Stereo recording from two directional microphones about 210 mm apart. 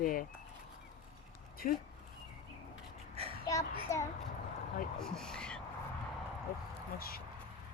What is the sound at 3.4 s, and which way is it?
Speech, 15° left (ahead or behind).